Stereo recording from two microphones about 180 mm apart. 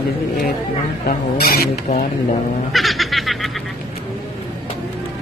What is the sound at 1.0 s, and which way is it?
Speech, 60° left (ahead or behind).